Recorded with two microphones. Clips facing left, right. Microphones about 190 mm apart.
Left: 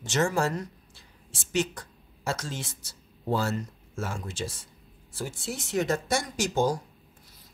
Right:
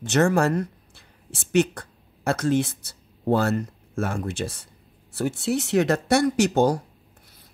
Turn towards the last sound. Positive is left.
turn(degrees=-65)  # may be behind; listen again after turning